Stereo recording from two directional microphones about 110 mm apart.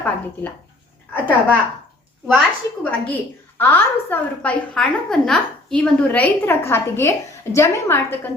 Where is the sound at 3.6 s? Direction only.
15° left (ahead or behind).